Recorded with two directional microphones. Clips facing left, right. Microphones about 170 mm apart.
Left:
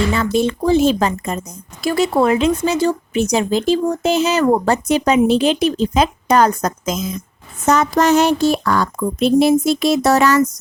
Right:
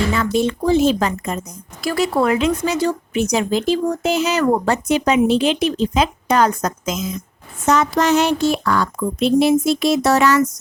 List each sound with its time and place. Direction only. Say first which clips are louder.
0.1 s speech: left 1 dB; 30° left (ahead or behind)
7.6 s speech: left 2 dB; 45° left (ahead or behind)